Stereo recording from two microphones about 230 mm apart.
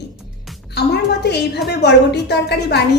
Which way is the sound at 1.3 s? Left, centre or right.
Left.